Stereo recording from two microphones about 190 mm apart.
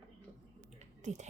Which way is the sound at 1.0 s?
40° right (ahead or behind).